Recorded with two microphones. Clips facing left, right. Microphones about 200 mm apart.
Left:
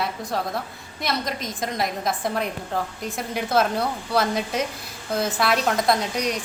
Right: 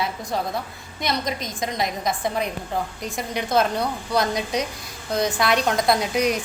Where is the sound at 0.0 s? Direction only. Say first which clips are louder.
Right 1 dB; centre (ahead or behind).